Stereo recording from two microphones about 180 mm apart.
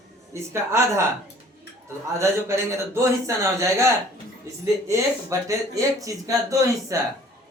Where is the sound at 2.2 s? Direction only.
15° right (ahead or behind).